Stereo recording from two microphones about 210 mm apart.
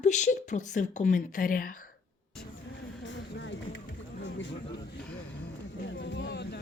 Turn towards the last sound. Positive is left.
turn(degrees=55)  # may be behind; listen again after turning